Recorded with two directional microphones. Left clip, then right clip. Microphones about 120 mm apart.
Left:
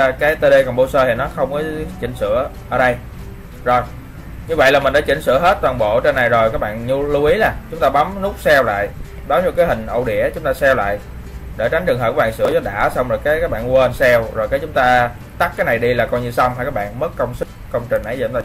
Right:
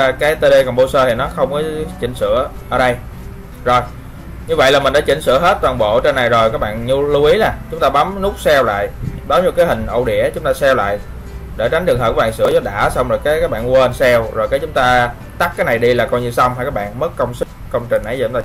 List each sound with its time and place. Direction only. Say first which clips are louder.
0.0 s speech: right 1 dB; 5° right (ahead or behind)
4.5 s speech: right 1 dB; 5° right (ahead or behind)